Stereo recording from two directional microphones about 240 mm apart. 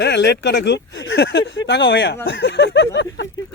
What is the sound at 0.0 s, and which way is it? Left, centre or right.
Speech, left.